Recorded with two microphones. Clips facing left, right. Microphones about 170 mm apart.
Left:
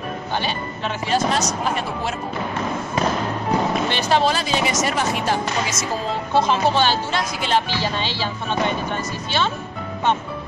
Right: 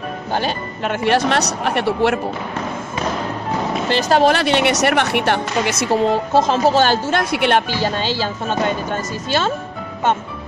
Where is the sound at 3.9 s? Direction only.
45° right (ahead or behind).